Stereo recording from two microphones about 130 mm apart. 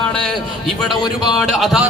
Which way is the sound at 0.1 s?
5° left (ahead or behind).